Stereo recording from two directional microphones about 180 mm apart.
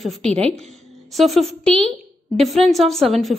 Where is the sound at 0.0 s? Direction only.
Centre (ahead or behind).